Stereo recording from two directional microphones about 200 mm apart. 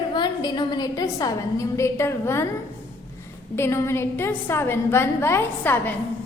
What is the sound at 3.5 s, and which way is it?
A woman's voice, 15° left (ahead or behind).